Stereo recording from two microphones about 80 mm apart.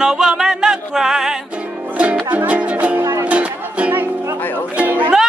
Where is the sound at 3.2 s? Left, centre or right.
Centre.